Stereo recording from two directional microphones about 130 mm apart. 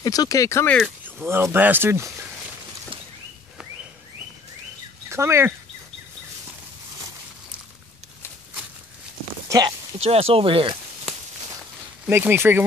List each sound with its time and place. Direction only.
0.0 s speech: 30° left (ahead or behind)
1.0 s speech: 15° right (ahead or behind)
5.1 s speech: 20° right (ahead or behind)
9.5 s speech: 30° right (ahead or behind)
9.9 s speech: 50° right (ahead or behind)
12.1 s speech: 20° right (ahead or behind)